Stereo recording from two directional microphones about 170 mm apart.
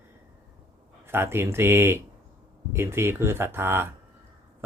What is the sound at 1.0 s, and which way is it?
Speech, 15° right (ahead or behind).